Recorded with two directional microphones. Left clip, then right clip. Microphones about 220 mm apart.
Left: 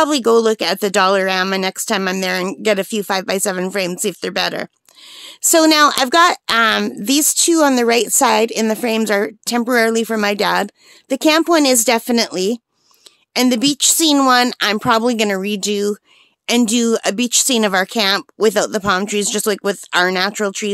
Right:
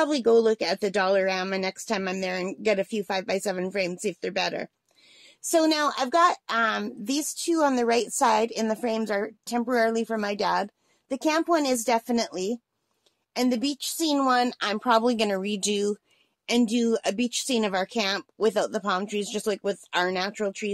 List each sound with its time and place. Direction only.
0.0 s speech: 35° left (ahead or behind)
16.4 s speech: 40° left (ahead or behind)